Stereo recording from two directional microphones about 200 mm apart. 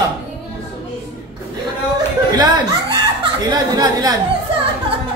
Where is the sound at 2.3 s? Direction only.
20° right (ahead or behind).